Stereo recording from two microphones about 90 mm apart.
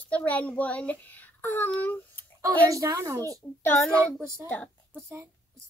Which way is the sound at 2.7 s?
40° right (ahead or behind).